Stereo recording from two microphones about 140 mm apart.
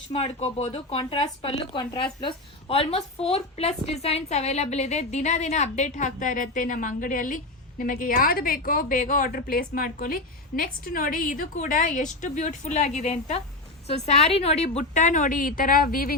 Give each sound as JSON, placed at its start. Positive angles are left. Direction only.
{"t": 0.1, "sound": "speech", "side_deg": 50}
{"t": 1.8, "sound": "a woman's voice", "side_deg": 30}
{"t": 11.5, "sound": "a woman's voice", "side_deg": 60}